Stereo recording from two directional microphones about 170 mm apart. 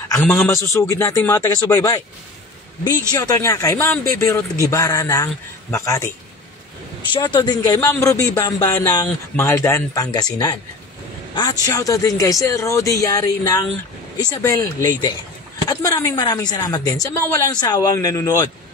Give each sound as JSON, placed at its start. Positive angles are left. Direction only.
{"t": 0.2, "sound": "a man's voice", "side_deg": 10}
{"t": 7.1, "sound": "a man's voice", "side_deg": 25}